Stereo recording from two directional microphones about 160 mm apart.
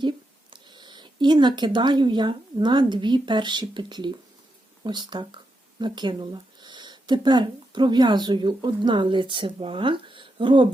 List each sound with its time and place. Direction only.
0.5 s speech: 30° right (ahead or behind)